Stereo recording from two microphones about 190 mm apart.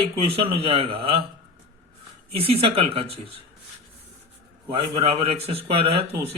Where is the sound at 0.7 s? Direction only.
30° right (ahead or behind).